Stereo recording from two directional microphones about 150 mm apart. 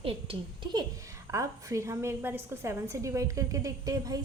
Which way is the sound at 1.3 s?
20° right (ahead or behind).